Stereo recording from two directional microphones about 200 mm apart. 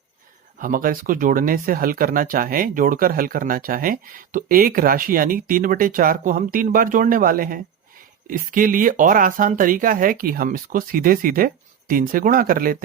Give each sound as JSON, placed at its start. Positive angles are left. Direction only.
{"t": 0.6, "sound": "speech", "side_deg": -45}